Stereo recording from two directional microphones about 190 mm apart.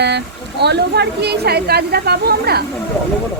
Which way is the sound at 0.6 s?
60° right (ahead or behind).